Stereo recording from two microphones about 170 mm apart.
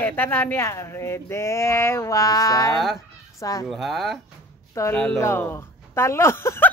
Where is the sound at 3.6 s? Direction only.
Centre (ahead or behind).